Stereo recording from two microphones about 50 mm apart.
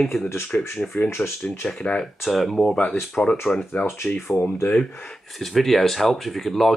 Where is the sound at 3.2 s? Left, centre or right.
Left.